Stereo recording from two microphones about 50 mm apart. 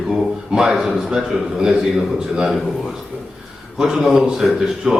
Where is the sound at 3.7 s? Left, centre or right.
Centre.